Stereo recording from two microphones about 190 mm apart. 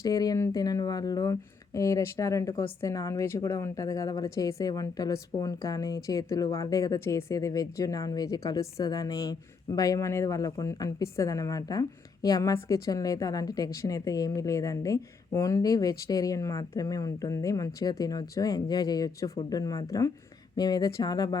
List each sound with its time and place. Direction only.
0.0 s speech: 20° left (ahead or behind)